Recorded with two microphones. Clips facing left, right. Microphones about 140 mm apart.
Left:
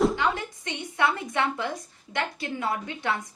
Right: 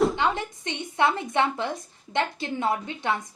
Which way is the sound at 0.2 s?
25° right (ahead or behind).